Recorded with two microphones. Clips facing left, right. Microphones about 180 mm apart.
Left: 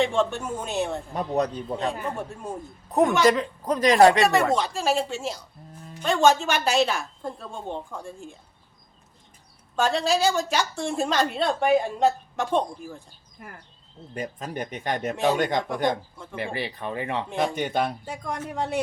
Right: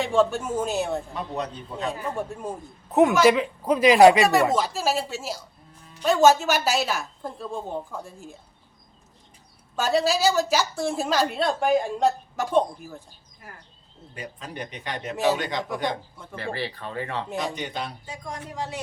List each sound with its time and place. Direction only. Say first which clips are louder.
0.0 s a woman's voice: right 1 dB; centre (ahead or behind)
1.1 s a man's voice: left 6 dB; 45° left (ahead or behind)
2.9 s a woman's voice: right 2 dB; 5° right (ahead or behind)
9.7 s a woman's voice: even; 5° right (ahead or behind)
14.1 s a man's voice: left 5 dB; 45° left (ahead or behind)
16.3 s speech: even; 15° left (ahead or behind)
17.3 s a man's voice: left 7 dB; 55° left (ahead or behind)